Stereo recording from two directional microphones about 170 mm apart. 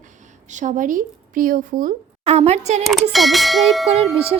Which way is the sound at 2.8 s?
Centre (ahead or behind).